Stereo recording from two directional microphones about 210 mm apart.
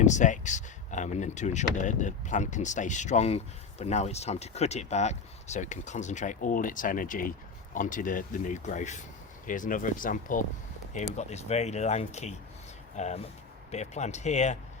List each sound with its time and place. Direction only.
0.0 s speech: 35° left (ahead or behind)